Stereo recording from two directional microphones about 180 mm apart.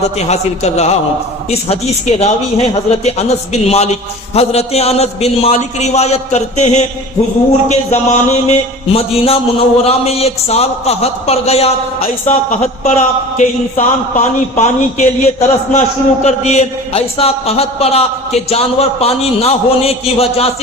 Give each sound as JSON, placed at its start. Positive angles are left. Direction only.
{"t": 0.0, "sound": "a man's voice", "side_deg": 40}